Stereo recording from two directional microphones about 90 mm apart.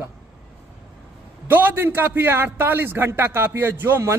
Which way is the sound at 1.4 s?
20° right (ahead or behind).